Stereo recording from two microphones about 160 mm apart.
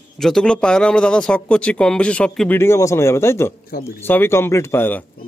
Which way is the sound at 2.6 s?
15° left (ahead or behind).